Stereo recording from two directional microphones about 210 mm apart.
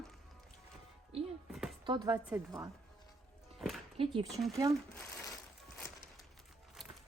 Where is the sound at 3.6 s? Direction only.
Centre (ahead or behind).